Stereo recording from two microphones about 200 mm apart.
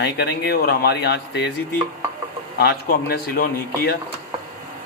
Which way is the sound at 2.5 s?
50° left (ahead or behind).